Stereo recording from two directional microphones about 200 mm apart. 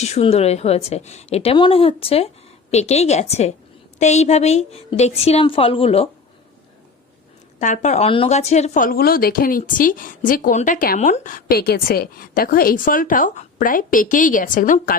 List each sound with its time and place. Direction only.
0.0 s a woman's voice: 30° left (ahead or behind)
7.6 s a woman's voice: 35° left (ahead or behind)